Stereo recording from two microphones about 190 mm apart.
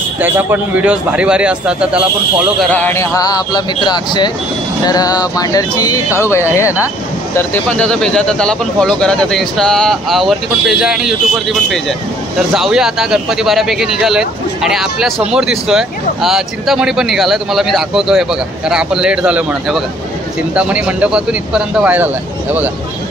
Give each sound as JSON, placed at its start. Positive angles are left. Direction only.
{"t": 0.2, "sound": "speech", "side_deg": -10}
{"t": 2.7, "sound": "speech", "side_deg": 10}
{"t": 12.5, "sound": "speech", "side_deg": -5}